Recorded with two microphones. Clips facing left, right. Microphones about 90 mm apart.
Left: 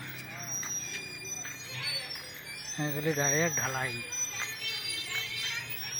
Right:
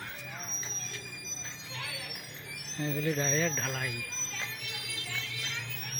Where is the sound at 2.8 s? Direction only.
25° left (ahead or behind).